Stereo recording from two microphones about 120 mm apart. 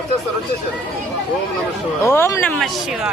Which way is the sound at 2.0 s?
20° left (ahead or behind).